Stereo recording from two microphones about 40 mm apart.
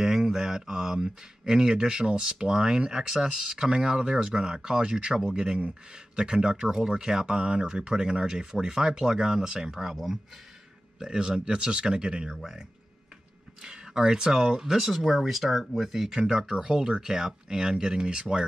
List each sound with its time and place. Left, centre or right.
0.0 s speech: centre
11.0 s speech: centre
13.6 s speech: centre